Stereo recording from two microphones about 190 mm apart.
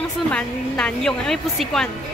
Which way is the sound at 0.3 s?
5° left (ahead or behind).